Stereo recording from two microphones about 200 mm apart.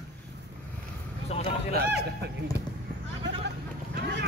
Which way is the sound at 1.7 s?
50° right (ahead or behind).